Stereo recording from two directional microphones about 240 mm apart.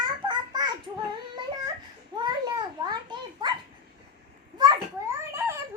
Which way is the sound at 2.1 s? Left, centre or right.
Centre.